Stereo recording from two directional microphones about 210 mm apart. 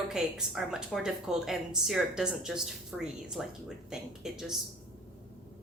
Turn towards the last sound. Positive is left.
turn(degrees=0)  # may be behind; listen again after turning